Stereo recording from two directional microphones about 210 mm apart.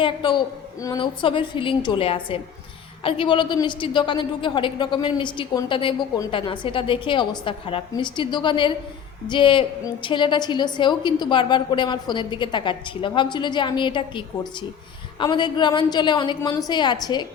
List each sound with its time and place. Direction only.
0.0 s a woman's voice: 25° left (ahead or behind)